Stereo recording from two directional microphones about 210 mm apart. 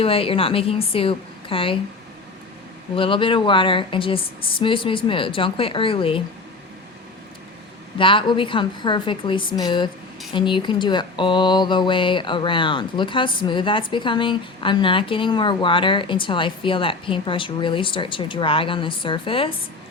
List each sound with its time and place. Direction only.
0.0 s speech: 25° left (ahead or behind)
2.9 s speech: 25° left (ahead or behind)
7.9 s speech: 25° left (ahead or behind)